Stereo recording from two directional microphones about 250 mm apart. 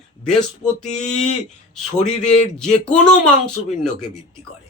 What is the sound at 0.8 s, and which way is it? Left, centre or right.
Speech, left.